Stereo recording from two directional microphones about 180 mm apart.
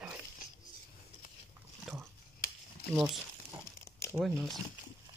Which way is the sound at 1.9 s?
Centre (ahead or behind).